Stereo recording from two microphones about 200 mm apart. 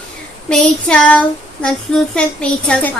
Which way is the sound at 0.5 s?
5° left (ahead or behind).